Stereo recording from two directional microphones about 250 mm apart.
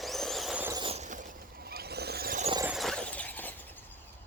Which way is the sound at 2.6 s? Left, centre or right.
Centre.